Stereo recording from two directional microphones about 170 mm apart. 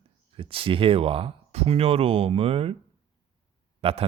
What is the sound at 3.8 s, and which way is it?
Speech, 35° right (ahead or behind).